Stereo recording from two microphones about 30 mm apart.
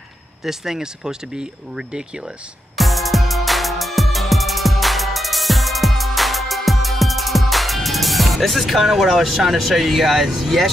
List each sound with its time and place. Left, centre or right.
0.4 s speech: centre
2.7 s music: centre
8.8 s speech: centre
10.4 s speech: centre